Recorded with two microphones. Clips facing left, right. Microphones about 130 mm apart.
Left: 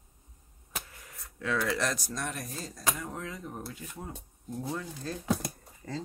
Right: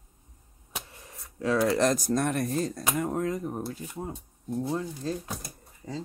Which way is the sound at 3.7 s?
25° right (ahead or behind).